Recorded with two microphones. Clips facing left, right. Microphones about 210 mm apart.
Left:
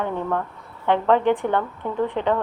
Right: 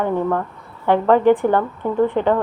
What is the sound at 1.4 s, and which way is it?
Speech, 40° right (ahead or behind).